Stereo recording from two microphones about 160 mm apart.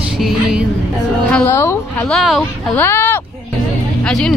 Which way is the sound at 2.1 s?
Centre (ahead or behind).